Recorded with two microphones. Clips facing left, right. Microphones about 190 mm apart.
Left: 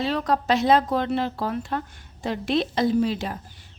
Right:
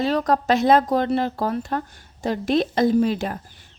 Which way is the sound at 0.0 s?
45° right (ahead or behind).